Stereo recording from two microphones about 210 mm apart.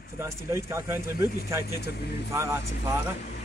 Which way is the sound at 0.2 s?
15° right (ahead or behind).